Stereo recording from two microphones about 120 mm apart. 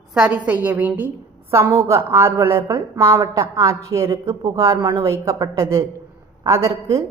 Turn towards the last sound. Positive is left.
turn(degrees=-25)  # may be behind; listen again after turning